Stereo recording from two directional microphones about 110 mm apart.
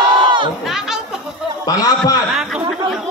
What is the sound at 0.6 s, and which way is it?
Chatter, 5° right (ahead or behind).